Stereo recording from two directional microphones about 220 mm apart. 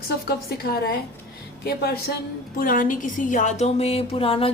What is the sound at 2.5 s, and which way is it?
A woman's voice, 40° left (ahead or behind).